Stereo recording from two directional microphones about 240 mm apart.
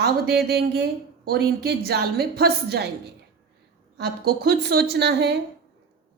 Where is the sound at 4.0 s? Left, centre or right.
Right.